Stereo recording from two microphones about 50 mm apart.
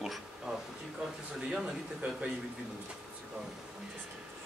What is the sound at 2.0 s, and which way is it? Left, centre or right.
Speech, right.